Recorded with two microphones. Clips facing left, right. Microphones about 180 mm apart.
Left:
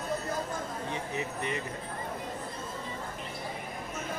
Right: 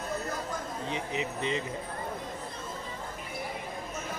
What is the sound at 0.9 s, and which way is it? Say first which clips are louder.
Speech: right 4 dB; 20° right (ahead or behind).